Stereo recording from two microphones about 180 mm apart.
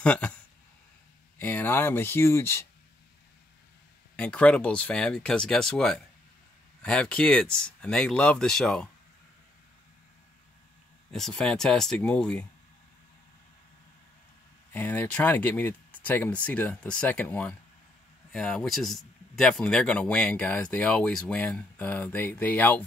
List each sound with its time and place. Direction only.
0.0 s speech: 5° left (ahead or behind)
1.4 s speech: 10° left (ahead or behind)
4.2 s speech: 5° left (ahead or behind)
11.1 s speech: 5° left (ahead or behind)
14.7 s speech: 10° left (ahead or behind)